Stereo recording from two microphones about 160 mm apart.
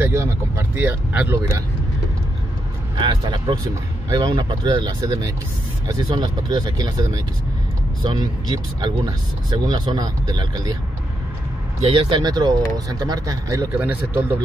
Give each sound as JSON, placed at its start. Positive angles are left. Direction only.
{"t": 0.0, "sound": "speech", "side_deg": -15}
{"t": 3.0, "sound": "speech", "side_deg": -30}
{"t": 11.8, "sound": "speech", "side_deg": -35}
{"t": 13.7, "sound": "speech", "side_deg": -10}